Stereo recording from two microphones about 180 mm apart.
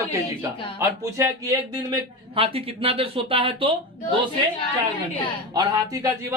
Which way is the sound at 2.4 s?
30° right (ahead or behind).